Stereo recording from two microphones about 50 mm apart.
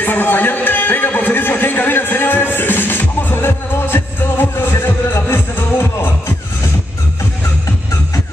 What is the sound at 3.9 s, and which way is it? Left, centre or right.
Music, left.